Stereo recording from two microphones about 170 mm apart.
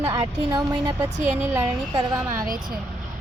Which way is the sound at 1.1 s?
45° right (ahead or behind).